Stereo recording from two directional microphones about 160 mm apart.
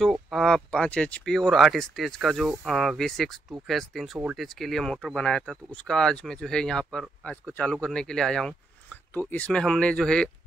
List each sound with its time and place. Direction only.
0.0 s speech: centre (ahead or behind)